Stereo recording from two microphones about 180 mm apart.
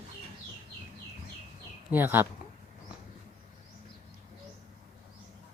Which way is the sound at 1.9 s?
10° right (ahead or behind).